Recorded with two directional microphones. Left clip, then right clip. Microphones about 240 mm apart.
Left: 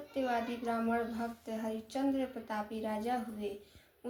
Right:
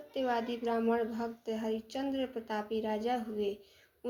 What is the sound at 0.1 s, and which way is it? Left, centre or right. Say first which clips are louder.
Speech: right 2 dB; right.